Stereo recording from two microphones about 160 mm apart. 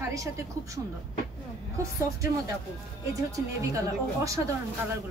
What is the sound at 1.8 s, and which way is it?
Speech, 20° right (ahead or behind).